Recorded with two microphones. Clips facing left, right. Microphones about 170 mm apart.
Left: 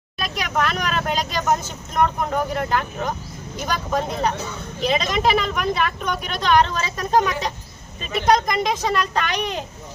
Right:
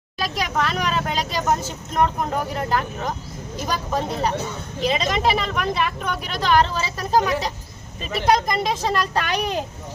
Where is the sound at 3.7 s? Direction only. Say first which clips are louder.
Left 1 dB; 5° right (ahead or behind).